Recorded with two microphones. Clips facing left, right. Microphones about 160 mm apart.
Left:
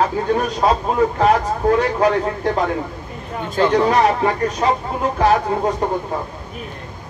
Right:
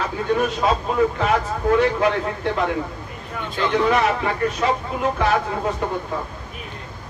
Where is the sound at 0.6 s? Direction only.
35° left (ahead or behind).